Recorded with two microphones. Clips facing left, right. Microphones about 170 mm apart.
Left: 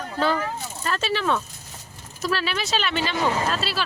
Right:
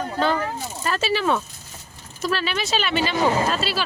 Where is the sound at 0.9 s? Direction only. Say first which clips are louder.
Right 2 dB; 5° right (ahead or behind).